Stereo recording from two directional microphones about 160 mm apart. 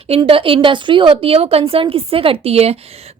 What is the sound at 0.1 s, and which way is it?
A woman's voice, 35° right (ahead or behind).